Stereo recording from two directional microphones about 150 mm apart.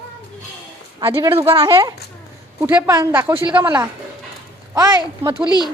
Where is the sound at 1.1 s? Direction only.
40° right (ahead or behind).